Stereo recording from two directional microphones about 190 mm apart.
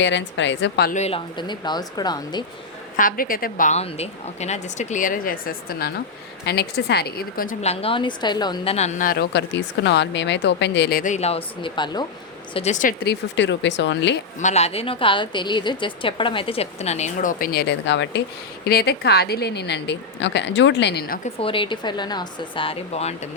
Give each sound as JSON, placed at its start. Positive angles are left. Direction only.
{"t": 0.0, "sound": "speech", "side_deg": 70}
{"t": 0.9, "sound": "speech", "side_deg": 35}
{"t": 2.9, "sound": "a woman's voice", "side_deg": 45}
{"t": 7.6, "sound": "a woman's voice", "side_deg": 30}
{"t": 9.3, "sound": "speech", "side_deg": 65}
{"t": 12.5, "sound": "a woman's voice", "side_deg": 40}
{"t": 13.1, "sound": "speech", "side_deg": 70}
{"t": 14.3, "sound": "a woman's voice", "side_deg": 35}
{"t": 18.6, "sound": "speech", "side_deg": 55}
{"t": 21.4, "sound": "speech", "side_deg": 25}